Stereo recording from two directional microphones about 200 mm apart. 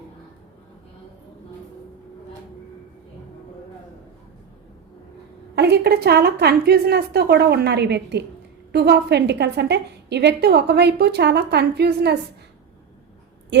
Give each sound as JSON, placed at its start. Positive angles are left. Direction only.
{"t": 5.5, "sound": "a woman's voice", "side_deg": -55}
{"t": 13.5, "sound": "speech", "side_deg": -60}